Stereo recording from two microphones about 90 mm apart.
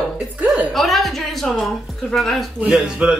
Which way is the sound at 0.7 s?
Centre (ahead or behind).